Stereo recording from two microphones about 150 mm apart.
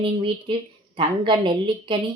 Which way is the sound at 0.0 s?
35° right (ahead or behind).